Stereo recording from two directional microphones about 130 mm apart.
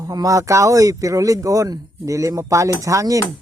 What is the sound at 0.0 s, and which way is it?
Speech, 30° right (ahead or behind).